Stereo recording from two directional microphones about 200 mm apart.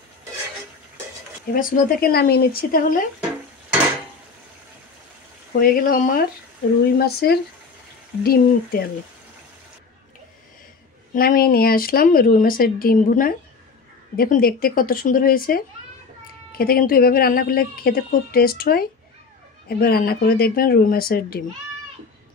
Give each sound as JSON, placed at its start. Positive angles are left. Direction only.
{"t": 1.5, "sound": "speech", "side_deg": 45}
{"t": 5.6, "sound": "speech", "side_deg": 45}
{"t": 11.1, "sound": "speech", "side_deg": 50}